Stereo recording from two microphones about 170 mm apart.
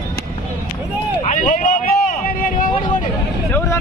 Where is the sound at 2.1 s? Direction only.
55° left (ahead or behind).